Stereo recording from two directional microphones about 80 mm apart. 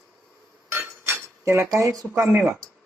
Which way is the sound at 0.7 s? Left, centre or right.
Right.